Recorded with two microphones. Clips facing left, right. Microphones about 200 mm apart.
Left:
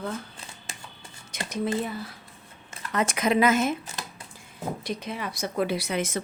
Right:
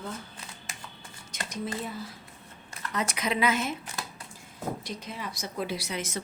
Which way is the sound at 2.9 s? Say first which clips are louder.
Left 6 dB; 50° left (ahead or behind).